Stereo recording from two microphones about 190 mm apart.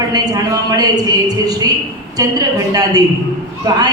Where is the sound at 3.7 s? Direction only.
20° right (ahead or behind).